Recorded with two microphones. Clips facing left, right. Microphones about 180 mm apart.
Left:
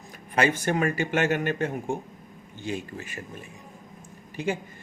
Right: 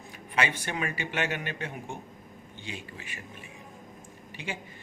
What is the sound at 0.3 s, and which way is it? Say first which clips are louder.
Speech: left 7 dB; 45° left (ahead or behind).